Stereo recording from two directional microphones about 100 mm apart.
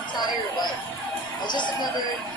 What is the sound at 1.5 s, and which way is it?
Speech, 50° left (ahead or behind).